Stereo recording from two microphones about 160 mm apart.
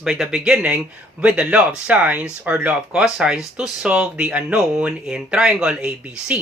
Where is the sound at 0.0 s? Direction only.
Centre (ahead or behind).